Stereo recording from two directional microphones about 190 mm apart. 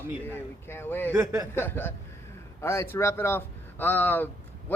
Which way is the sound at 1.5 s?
10° left (ahead or behind).